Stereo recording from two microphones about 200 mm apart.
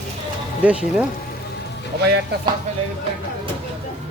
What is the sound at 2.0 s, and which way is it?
Speech, 55° right (ahead or behind).